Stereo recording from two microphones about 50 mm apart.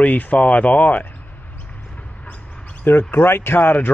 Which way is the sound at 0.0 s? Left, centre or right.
Left.